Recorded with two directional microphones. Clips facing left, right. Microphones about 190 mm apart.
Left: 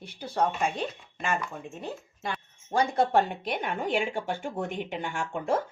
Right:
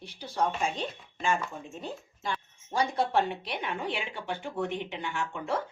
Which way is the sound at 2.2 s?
50° left (ahead or behind).